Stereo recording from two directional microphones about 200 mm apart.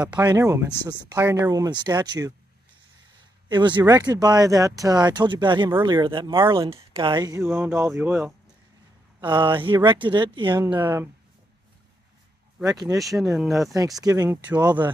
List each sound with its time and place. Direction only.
0.3 s speech: 15° right (ahead or behind)
3.4 s speech: 25° right (ahead or behind)
9.2 s speech: 25° right (ahead or behind)
10.8 s speech: 10° right (ahead or behind)
12.6 s speech: 20° right (ahead or behind)
13.0 s speech: centre (ahead or behind)
14.0 s speech: 20° right (ahead or behind)
14.6 s speech: 20° right (ahead or behind)